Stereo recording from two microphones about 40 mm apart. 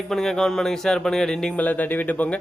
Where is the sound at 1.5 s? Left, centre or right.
Left.